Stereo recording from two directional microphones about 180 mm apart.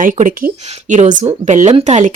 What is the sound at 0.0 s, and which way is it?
Speech, 45° right (ahead or behind).